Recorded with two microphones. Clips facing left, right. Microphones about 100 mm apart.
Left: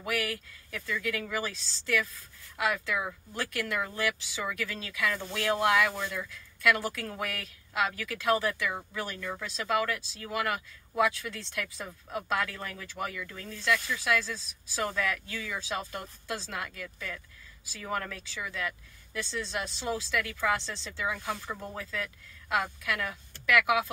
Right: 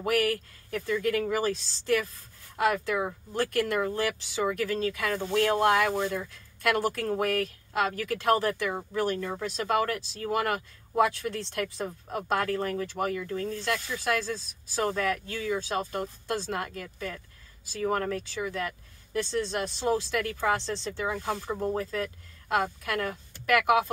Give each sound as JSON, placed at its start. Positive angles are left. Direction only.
{"t": 0.0, "sound": "speech", "side_deg": -50}
{"t": 1.5, "sound": "speech", "side_deg": -50}
{"t": 5.1, "sound": "speech", "side_deg": -35}
{"t": 14.8, "sound": "speech", "side_deg": -35}